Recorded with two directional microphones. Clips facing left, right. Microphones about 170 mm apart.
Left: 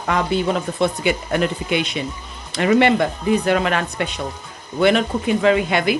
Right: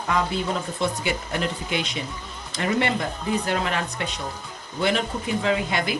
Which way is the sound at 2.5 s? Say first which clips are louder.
Left 9 dB; 80° left.